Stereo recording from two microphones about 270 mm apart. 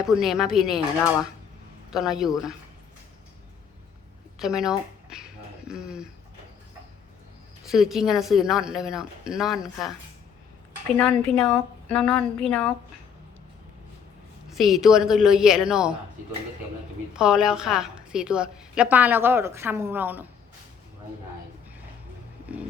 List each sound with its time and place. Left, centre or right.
0.0 s a woman's voice: centre
1.9 s a woman's voice: centre
4.4 s a sound: centre
7.7 s a woman's voice: centre
10.9 s a woman's voice: centre
14.5 s a woman's voice: centre
17.2 s a woman's voice: centre